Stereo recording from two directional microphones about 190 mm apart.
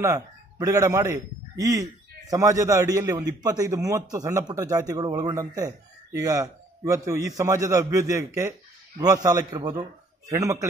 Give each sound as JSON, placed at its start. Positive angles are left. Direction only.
{"t": 0.0, "sound": "a man's voice", "side_deg": -15}